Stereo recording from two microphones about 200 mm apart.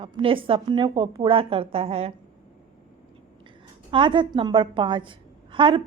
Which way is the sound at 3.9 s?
25° right (ahead or behind).